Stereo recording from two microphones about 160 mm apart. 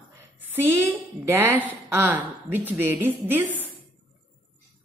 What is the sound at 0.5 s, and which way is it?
A woman's voice, 10° right (ahead or behind).